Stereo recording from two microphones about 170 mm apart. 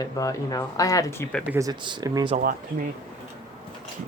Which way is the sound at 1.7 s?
25° right (ahead or behind).